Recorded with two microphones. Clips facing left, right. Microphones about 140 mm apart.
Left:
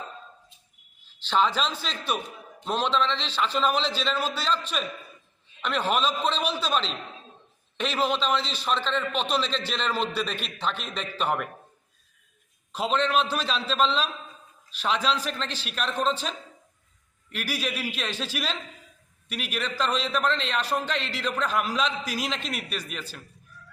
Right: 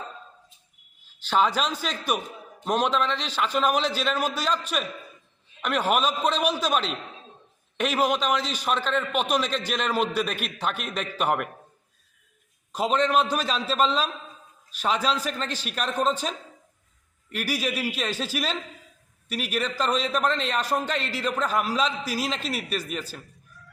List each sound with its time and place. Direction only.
1.3 s a man's voice: 10° right (ahead or behind)
12.7 s a man's voice: 10° right (ahead or behind)
17.3 s a man's voice: 10° right (ahead or behind)
19.3 s a man's voice: 40° right (ahead or behind)
19.7 s a man's voice: 10° right (ahead or behind)
21.4 s a man's voice: 40° right (ahead or behind)